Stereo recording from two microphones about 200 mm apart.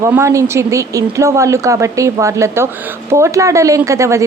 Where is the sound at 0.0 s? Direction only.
15° right (ahead or behind).